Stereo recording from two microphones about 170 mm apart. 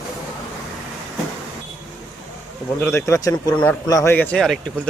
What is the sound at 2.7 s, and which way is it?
A man's voice, 15° left (ahead or behind).